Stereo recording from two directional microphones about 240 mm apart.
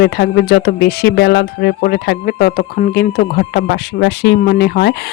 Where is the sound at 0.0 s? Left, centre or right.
Left.